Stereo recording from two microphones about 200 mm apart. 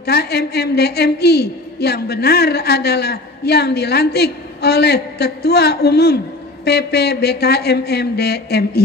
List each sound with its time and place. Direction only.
0.0 s a woman's voice: 55° left (ahead or behind)